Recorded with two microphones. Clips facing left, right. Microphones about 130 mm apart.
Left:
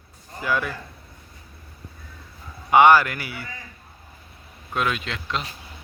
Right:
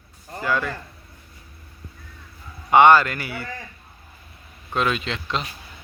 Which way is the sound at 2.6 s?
15° left (ahead or behind).